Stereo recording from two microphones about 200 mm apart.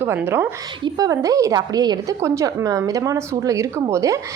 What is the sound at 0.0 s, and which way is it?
A woman's voice, 10° right (ahead or behind).